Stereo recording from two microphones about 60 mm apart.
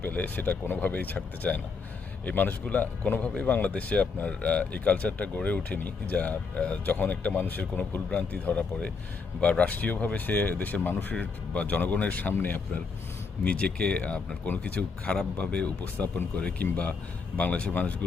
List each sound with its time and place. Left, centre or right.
0.0 s a man's voice: left